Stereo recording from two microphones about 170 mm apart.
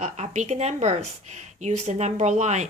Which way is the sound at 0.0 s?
40° right (ahead or behind).